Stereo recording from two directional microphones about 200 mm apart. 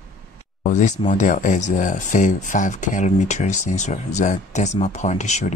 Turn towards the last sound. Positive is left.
turn(degrees=35)  # may be behind; listen again after turning